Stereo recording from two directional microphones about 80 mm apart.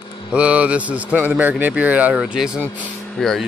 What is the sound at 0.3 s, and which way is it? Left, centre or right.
Speech, centre.